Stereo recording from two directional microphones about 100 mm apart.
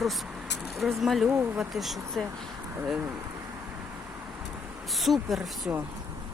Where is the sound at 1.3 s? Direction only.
20° right (ahead or behind).